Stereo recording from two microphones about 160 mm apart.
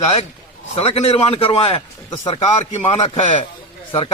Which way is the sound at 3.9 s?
35° left (ahead or behind).